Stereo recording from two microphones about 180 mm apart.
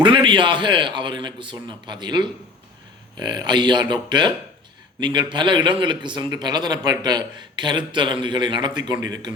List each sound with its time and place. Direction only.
0.0 s a man's voice: 25° right (ahead or behind)